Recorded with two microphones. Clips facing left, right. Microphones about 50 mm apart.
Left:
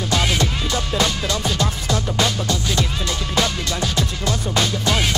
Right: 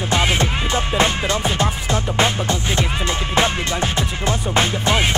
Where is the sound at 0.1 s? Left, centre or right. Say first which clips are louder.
Right 2 dB; right.